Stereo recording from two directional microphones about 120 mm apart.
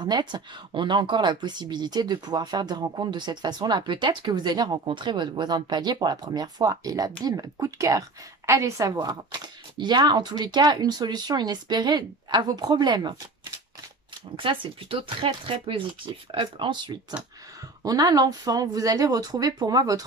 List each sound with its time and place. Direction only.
0.0 s speech: 35° right (ahead or behind)
14.3 s speech: 45° right (ahead or behind)
17.8 s speech: 30° right (ahead or behind)